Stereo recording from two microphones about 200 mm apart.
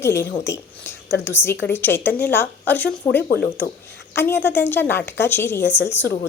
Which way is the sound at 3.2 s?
50° left (ahead or behind).